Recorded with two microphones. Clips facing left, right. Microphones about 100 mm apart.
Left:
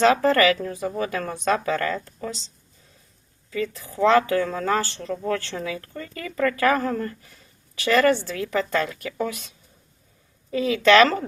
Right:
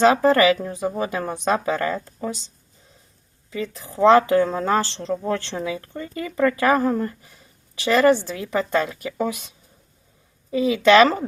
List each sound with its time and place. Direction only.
0.0 s speech: 15° right (ahead or behind)
3.5 s speech: 20° right (ahead or behind)
10.5 s speech: 15° right (ahead or behind)